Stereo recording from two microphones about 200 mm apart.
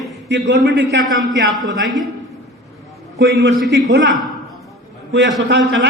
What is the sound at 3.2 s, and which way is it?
Speech, 65° right (ahead or behind).